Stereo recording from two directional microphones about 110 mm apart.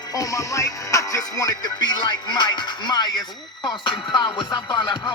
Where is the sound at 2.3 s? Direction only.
40° left (ahead or behind).